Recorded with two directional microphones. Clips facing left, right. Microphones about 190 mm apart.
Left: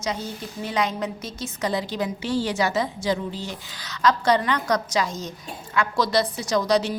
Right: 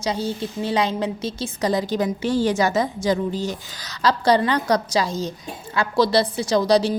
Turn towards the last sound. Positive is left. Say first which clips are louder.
# right 4 dB
turn(degrees=-35)  # may be behind; listen again after turning